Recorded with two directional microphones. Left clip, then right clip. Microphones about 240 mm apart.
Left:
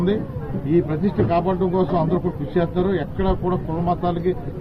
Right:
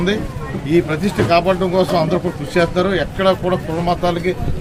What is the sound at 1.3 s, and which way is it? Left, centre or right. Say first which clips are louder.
Speech: right 8 dB; centre.